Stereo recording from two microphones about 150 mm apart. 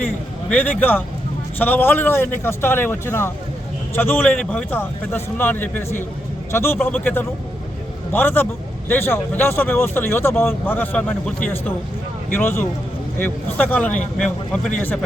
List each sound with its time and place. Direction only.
0.5 s a man's voice: 15° left (ahead or behind)